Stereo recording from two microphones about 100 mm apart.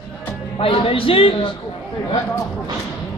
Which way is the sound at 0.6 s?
70° left (ahead or behind).